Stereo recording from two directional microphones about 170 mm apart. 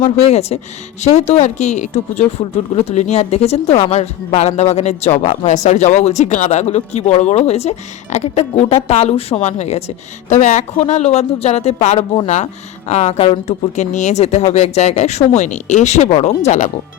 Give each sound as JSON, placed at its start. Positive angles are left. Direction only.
{"t": 0.0, "sound": "speech", "side_deg": 40}